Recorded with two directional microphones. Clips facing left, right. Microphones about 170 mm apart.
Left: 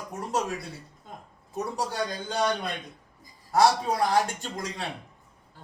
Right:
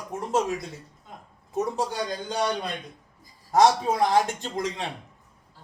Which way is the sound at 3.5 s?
20° right (ahead or behind).